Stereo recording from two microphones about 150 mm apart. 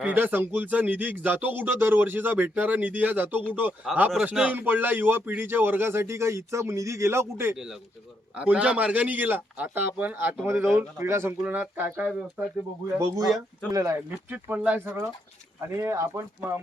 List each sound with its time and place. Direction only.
0.0 s speech: 10° right (ahead or behind)
7.5 s speech: 5° right (ahead or behind)
13.0 s speech: 20° right (ahead or behind)
14.5 s speech: 10° right (ahead or behind)